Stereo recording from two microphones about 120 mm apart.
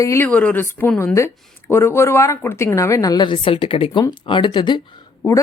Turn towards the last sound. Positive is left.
turn(degrees=25)  # may be behind; listen again after turning